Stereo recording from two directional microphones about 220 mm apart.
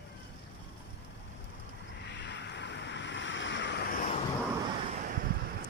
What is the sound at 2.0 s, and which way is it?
Vehicle, 50° left (ahead or behind).